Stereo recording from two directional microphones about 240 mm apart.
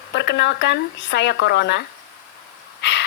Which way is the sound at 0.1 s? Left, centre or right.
Left.